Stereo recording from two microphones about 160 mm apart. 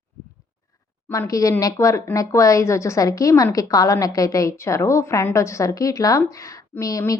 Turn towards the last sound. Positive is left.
turn(degrees=20)  # may be behind; listen again after turning